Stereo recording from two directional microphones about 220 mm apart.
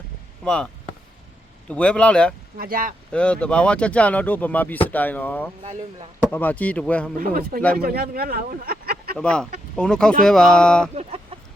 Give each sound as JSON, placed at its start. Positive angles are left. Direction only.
{"t": 0.4, "sound": "speech", "side_deg": 5}
{"t": 2.6, "sound": "speech", "side_deg": -40}
{"t": 3.1, "sound": "speech", "side_deg": 5}
{"t": 7.2, "sound": "speech", "side_deg": -40}
{"t": 9.1, "sound": "speech", "side_deg": 5}
{"t": 10.9, "sound": "chicken", "side_deg": -25}